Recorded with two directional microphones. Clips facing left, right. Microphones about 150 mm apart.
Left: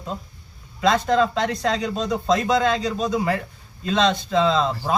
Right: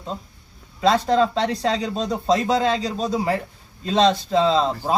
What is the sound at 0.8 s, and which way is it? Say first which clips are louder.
A man's voice: right 1 dB; 30° right (ahead or behind).